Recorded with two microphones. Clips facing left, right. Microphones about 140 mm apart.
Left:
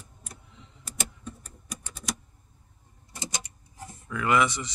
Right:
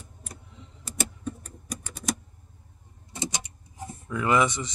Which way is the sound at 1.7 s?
50° right (ahead or behind).